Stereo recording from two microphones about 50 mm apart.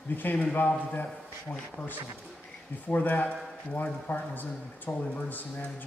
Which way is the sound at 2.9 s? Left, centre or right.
Left.